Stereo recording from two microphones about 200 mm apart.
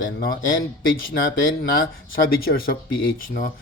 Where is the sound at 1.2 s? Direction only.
70° left (ahead or behind).